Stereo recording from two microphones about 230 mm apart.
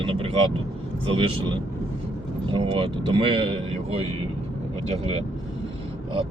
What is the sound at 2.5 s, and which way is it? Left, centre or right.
Speech, right.